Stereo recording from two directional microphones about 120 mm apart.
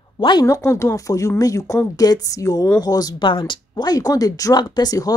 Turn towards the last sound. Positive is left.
turn(degrees=30)  # may be behind; listen again after turning